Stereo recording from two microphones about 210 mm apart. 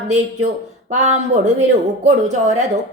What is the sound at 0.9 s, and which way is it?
Speech, 35° right (ahead or behind).